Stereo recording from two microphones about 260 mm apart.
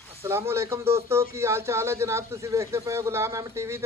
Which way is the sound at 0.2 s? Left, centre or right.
Centre.